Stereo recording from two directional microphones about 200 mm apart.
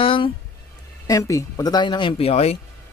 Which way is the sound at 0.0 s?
25° left (ahead or behind).